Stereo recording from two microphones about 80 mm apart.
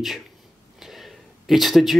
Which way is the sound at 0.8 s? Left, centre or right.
Centre.